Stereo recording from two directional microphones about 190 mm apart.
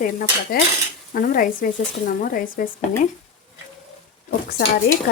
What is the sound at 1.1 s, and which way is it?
Speech, 45° left (ahead or behind).